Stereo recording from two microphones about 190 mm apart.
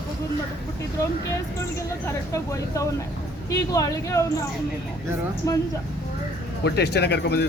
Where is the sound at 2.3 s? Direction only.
15° left (ahead or behind).